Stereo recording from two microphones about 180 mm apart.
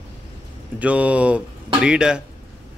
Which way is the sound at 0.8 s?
10° right (ahead or behind).